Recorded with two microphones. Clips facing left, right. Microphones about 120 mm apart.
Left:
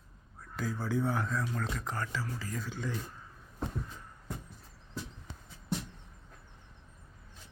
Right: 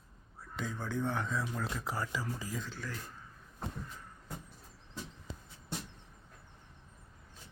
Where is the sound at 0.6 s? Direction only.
5° left (ahead or behind); by 2.5 s 15° right (ahead or behind).